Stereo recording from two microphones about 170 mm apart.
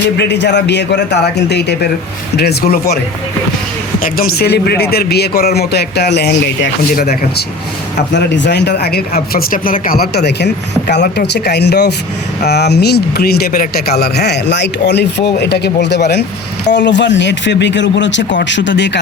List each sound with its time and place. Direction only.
0.2 s speech: 85° left; by 2.6 s 70° left (ahead or behind)
4.0 s speech: 60° left (ahead or behind); by 6.7 s 80° left
6.9 s speech: 60° left (ahead or behind)
7.9 s speech: 85° left; by 9.0 s 70° left (ahead or behind)
9.3 s speech: 55° left (ahead or behind); by 18.9 s 90° left